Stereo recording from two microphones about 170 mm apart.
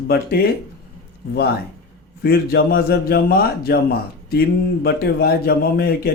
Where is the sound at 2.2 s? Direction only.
65° left (ahead or behind).